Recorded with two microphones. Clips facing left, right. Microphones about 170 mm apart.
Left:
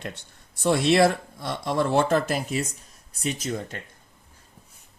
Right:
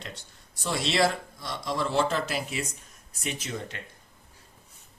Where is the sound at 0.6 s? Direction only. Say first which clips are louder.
Left 7 dB; 55° left (ahead or behind).